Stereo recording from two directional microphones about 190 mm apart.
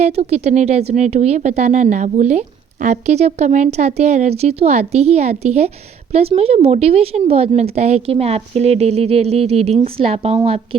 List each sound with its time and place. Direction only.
0.0 s speech: 35° right (ahead or behind)